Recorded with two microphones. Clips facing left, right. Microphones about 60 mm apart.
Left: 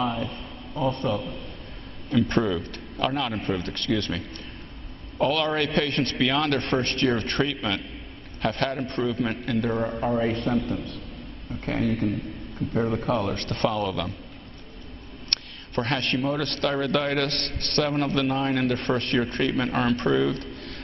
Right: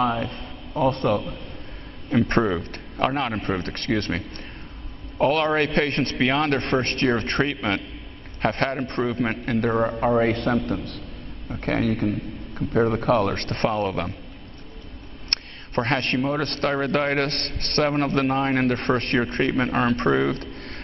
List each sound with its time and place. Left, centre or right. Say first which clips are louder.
0.0 s a man's voice: right 4 dB; right
2.0 s a man's voice: right 2 dB; right
5.2 s a man's voice: right 3 dB; right
11.6 s a man's voice: right 2 dB; right
15.2 s a sound: right 2 dB; right
16.2 s a man's voice: right 2 dB; right
16.4 s a man's voice: right 2 dB; right